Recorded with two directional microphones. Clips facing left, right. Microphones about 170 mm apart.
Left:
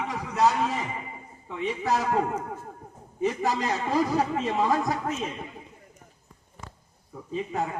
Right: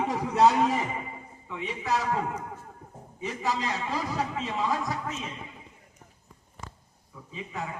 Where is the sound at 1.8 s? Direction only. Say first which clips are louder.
Left 2 dB; 45° left (ahead or behind).